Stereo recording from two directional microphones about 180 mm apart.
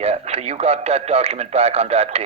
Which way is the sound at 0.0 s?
35° right (ahead or behind).